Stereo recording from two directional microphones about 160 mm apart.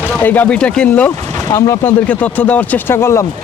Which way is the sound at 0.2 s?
10° left (ahead or behind).